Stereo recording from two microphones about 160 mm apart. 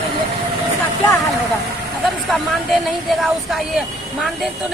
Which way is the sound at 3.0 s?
Centre (ahead or behind).